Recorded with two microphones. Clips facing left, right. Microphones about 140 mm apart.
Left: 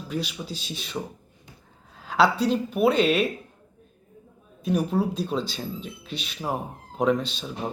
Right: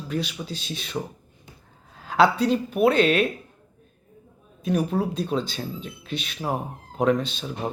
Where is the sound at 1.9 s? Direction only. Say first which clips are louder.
Right 2 dB; centre (ahead or behind).